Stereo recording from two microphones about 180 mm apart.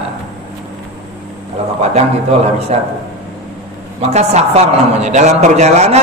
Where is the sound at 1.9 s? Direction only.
35° right (ahead or behind).